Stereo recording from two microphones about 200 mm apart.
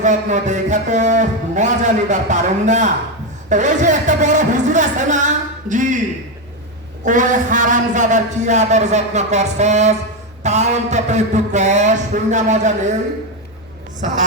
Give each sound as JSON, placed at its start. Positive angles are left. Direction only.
{"t": 0.0, "sound": "a man's voice", "side_deg": -35}
{"t": 7.0, "sound": "a man's voice", "side_deg": -40}